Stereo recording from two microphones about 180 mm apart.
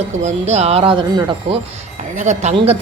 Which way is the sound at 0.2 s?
40° right (ahead or behind).